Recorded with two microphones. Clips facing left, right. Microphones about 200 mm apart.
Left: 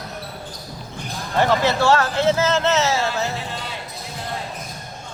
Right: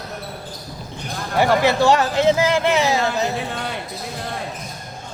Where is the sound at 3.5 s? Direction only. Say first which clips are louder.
Right 4 dB; 55° right (ahead or behind).